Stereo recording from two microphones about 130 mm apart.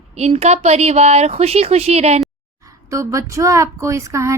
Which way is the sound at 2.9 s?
25° right (ahead or behind).